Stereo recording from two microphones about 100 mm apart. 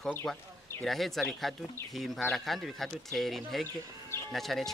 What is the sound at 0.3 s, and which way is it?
Speech, 5° left (ahead or behind).